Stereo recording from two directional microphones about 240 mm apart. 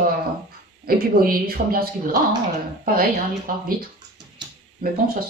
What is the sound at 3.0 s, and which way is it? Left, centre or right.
Speech, right.